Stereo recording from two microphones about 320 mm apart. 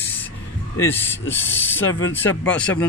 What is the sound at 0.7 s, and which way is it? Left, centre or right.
Speech, centre.